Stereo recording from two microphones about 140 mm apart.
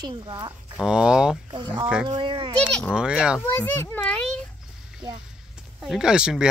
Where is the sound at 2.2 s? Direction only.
35° right (ahead or behind).